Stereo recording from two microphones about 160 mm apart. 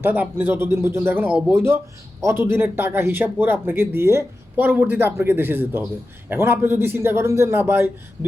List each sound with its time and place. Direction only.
0.0 s speech: 10° right (ahead or behind)